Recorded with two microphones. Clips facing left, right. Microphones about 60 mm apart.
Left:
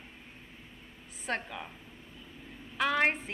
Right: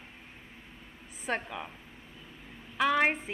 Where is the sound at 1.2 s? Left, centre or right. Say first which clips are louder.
Right 2 dB; centre.